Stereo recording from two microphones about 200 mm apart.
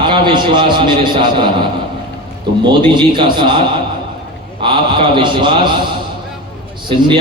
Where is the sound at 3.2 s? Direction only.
25° right (ahead or behind).